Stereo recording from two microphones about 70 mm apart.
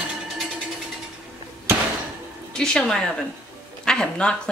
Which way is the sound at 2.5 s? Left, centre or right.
Centre.